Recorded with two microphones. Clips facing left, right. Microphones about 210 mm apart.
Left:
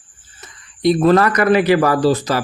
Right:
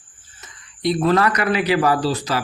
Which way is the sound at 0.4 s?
40° left (ahead or behind).